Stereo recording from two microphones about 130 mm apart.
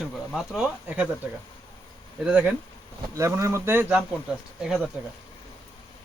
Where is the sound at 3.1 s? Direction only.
20° right (ahead or behind).